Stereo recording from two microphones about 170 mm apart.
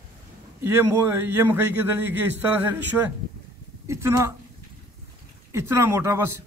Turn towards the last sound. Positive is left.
turn(degrees=-15)  # may be behind; listen again after turning